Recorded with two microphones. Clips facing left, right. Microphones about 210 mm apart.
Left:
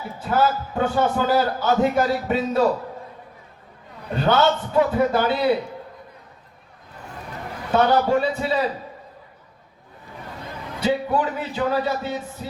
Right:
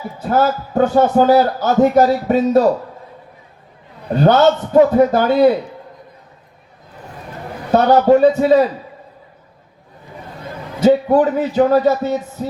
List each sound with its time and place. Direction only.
0.2 s a man's voice: 40° right (ahead or behind)
4.2 s a man's voice: 40° right (ahead or behind)
7.7 s a man's voice: 40° right (ahead or behind)
10.8 s a man's voice: 45° right (ahead or behind)